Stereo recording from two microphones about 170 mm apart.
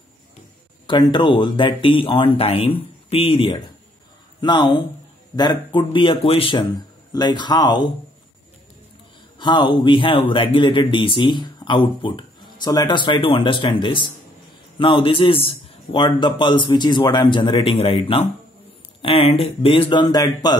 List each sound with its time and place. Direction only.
0.8 s speech: 25° left (ahead or behind)
9.4 s speech: 25° left (ahead or behind)